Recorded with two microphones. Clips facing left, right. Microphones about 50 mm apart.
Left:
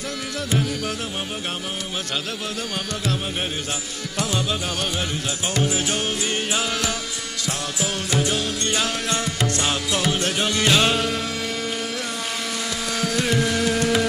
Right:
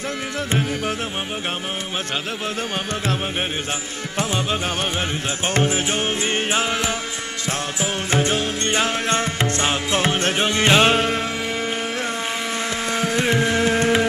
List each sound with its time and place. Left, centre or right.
0.5 s music: right
4.2 s music: right
12.9 s carnatic music: right